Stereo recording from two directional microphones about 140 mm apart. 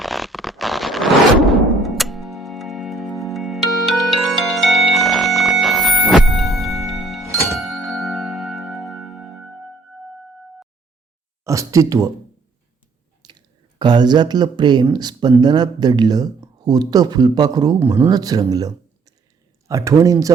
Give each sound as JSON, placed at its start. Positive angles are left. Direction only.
{"t": 0.0, "sound": "zipper", "side_deg": 0}
{"t": 7.5, "sound": "ding", "side_deg": 0}
{"t": 11.4, "sound": "speech", "side_deg": -20}
{"t": 13.2, "sound": "clicking", "side_deg": -30}
{"t": 13.7, "sound": "speech", "side_deg": -30}
{"t": 17.7, "sound": "speech", "side_deg": -20}